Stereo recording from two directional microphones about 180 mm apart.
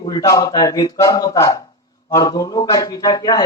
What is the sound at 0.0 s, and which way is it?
A man's voice, 20° left (ahead or behind).